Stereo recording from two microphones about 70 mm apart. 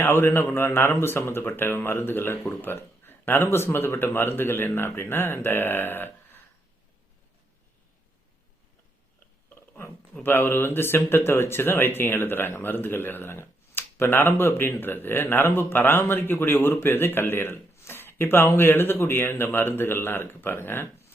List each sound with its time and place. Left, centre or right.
0.0 s speech: left
10.2 s speech: left